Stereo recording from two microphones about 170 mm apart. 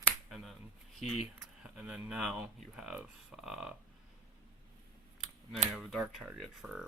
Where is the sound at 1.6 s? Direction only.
5° right (ahead or behind).